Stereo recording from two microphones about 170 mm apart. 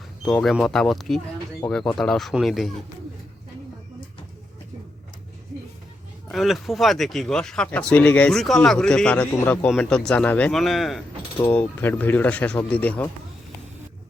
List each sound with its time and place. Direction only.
0.4 s speech: centre (ahead or behind)
6.2 s speech: centre (ahead or behind)